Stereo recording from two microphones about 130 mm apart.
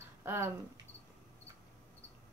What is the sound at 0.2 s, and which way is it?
Speech, 20° right (ahead or behind).